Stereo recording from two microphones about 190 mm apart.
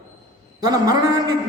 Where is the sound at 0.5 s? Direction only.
20° right (ahead or behind).